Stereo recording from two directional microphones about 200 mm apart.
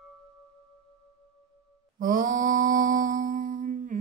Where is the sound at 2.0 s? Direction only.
40° right (ahead or behind).